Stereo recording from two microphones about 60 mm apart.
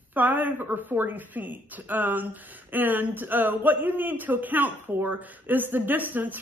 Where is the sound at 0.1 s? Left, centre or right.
Right.